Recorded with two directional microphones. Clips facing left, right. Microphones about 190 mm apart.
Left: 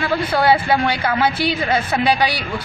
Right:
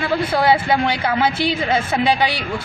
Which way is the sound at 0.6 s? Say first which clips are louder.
Even; 20° right (ahead or behind).